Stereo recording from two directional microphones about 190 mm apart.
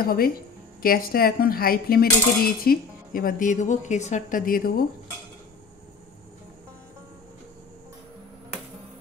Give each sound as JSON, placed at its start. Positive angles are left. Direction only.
{"t": 0.0, "sound": "speech", "side_deg": 50}